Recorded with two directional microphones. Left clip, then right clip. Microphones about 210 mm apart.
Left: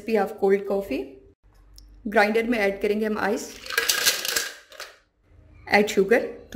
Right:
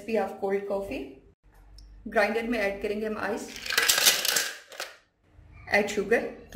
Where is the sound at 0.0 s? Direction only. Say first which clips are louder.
Left 6 dB; 50° left (ahead or behind).